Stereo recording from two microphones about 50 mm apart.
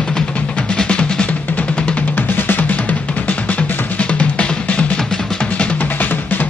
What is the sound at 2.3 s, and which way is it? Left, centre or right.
Music, left.